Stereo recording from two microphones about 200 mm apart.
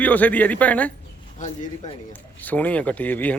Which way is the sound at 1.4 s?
40° left (ahead or behind).